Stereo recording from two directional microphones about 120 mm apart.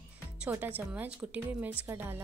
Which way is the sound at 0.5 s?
15° right (ahead or behind).